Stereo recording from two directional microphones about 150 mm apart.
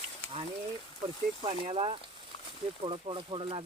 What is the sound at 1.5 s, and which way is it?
Speech, 40° right (ahead or behind).